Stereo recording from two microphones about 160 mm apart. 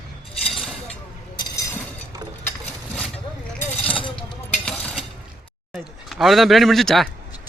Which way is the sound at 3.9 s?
35° left (ahead or behind).